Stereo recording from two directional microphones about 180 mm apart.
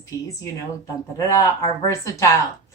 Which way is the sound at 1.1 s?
20° left (ahead or behind).